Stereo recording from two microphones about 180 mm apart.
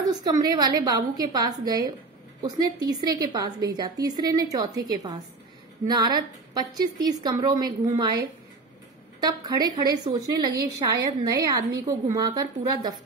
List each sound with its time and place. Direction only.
0.1 s a woman's voice: 20° right (ahead or behind)